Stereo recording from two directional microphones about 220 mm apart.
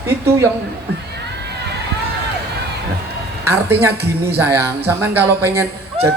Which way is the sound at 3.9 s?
45° right (ahead or behind).